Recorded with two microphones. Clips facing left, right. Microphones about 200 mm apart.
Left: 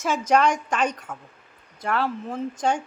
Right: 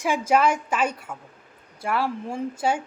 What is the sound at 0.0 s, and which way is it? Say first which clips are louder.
Speech: even; 10° right (ahead or behind).